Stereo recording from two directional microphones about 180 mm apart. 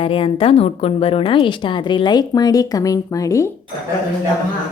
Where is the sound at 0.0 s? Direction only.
30° left (ahead or behind).